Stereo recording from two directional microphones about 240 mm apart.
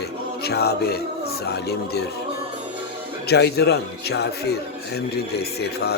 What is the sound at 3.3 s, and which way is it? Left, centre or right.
A man's voice, left.